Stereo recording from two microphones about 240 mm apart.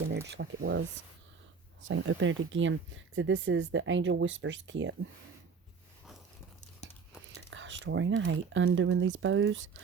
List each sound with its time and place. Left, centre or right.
0.3 s speech: right
1.8 s speech: right
7.3 s speech: right